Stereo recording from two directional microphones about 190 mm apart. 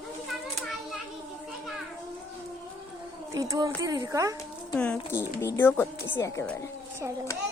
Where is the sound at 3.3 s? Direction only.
15° right (ahead or behind).